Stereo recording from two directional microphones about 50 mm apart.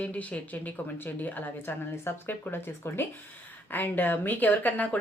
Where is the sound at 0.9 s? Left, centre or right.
Left.